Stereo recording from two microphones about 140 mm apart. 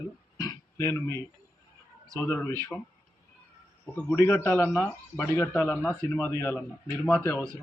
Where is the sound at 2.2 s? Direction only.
20° left (ahead or behind).